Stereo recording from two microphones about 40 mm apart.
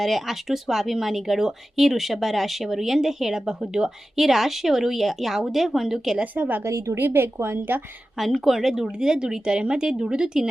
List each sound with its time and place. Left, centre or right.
0.0 s speech: centre
6.3 s a woman's voice: right
6.9 s a woman's voice: right
8.2 s speech: centre